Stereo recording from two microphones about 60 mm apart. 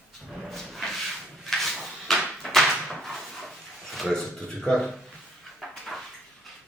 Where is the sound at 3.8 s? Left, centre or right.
Centre.